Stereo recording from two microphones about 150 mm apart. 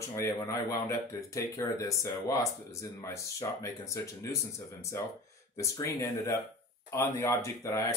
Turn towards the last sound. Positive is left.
turn(degrees=20)  # may be behind; listen again after turning